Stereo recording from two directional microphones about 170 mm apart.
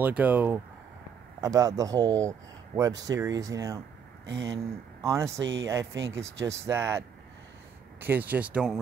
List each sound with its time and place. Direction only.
0.0 s speech: 10° right (ahead or behind)
1.4 s speech: 20° right (ahead or behind)